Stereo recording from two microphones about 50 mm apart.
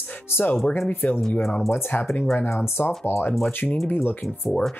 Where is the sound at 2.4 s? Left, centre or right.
Left.